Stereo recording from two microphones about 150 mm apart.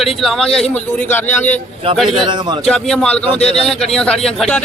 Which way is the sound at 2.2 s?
30° right (ahead or behind).